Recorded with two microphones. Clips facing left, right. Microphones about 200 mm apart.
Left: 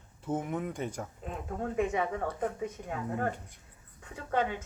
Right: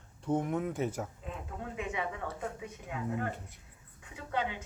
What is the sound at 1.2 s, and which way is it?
A woman's voice, 45° left (ahead or behind).